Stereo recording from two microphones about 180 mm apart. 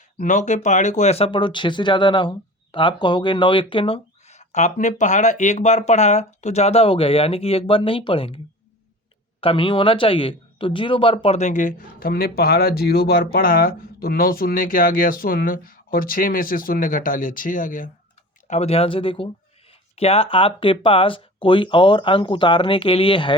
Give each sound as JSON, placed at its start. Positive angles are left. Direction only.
{"t": 0.2, "sound": "speech", "side_deg": 45}
{"t": 9.4, "sound": "speech", "side_deg": 30}
{"t": 18.4, "sound": "speech", "side_deg": 35}